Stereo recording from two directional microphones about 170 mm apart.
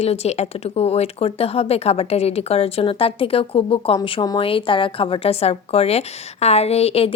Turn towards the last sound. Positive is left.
turn(degrees=35)  # may be behind; listen again after turning